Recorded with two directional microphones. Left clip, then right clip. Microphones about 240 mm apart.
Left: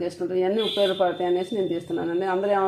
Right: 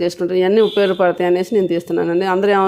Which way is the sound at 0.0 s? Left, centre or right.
Right.